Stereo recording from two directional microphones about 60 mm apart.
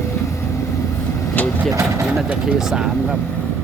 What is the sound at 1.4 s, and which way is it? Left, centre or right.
Vehicle, left.